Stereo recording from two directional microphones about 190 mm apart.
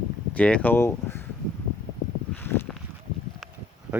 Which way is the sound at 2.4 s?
10° left (ahead or behind).